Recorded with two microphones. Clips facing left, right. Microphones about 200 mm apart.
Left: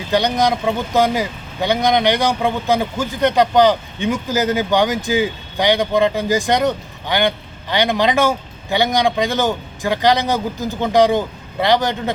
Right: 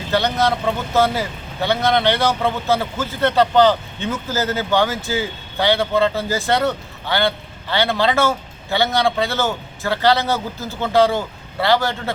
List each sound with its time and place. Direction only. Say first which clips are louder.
0.1 s speech: left 2 dB; 15° left (ahead or behind)